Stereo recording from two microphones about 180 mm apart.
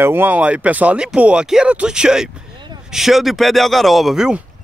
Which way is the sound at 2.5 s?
25° right (ahead or behind).